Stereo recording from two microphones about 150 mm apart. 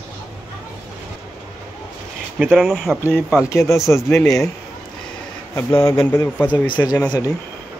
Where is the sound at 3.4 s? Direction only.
20° left (ahead or behind).